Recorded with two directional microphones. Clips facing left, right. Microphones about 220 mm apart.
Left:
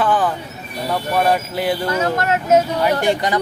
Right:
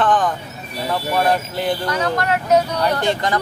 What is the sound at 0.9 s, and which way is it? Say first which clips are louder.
Speech: left 1 dB; 5° left (ahead or behind).